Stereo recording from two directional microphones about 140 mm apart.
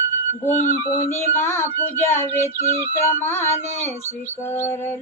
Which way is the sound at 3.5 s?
50° left (ahead or behind).